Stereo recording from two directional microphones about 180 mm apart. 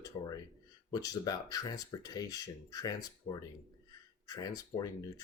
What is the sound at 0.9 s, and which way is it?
Speech, 20° left (ahead or behind).